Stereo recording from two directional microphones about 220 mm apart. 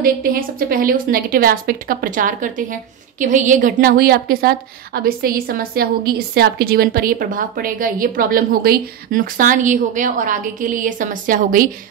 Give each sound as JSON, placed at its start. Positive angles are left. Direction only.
{"t": 0.0, "sound": "a woman's voice", "side_deg": -40}